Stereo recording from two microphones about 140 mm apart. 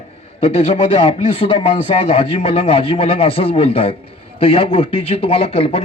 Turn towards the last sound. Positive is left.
turn(degrees=45)  # may be behind; listen again after turning